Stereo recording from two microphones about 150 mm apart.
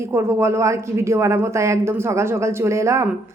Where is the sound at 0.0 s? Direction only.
20° right (ahead or behind).